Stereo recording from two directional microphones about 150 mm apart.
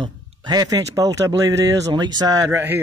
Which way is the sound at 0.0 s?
30° right (ahead or behind).